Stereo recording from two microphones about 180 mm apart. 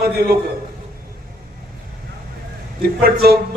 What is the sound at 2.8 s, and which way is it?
Speech, 60° right (ahead or behind).